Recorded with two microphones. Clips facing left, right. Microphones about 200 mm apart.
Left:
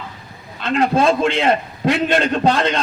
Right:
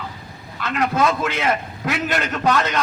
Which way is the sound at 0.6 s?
30° left (ahead or behind).